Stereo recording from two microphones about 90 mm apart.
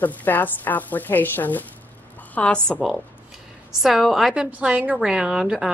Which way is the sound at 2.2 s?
15° left (ahead or behind).